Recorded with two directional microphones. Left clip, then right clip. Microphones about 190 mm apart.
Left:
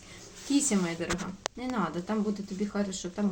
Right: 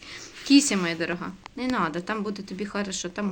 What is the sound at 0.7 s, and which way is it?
Speech, 15° right (ahead or behind).